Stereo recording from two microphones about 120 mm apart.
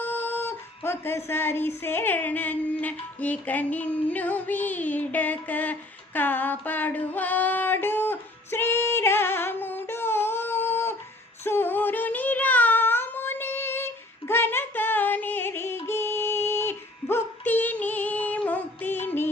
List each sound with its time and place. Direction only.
0.0 s speech: 15° left (ahead or behind)
6.1 s female singing: 15° left (ahead or behind)
11.4 s child singing: 20° left (ahead or behind)